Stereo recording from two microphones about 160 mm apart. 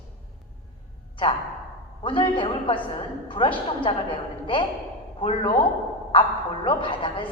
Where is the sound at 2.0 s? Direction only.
30° left (ahead or behind).